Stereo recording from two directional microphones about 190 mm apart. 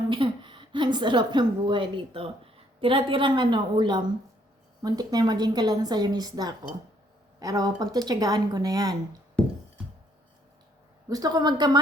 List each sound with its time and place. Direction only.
0.1 s a woman's voice: 25° right (ahead or behind)
11.1 s a woman's voice: 20° right (ahead or behind)